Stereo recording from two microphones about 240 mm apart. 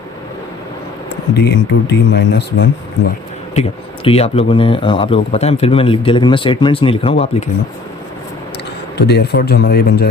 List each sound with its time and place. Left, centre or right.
1.3 s speech: left
3.5 s speech: left
9.0 s a man's voice: left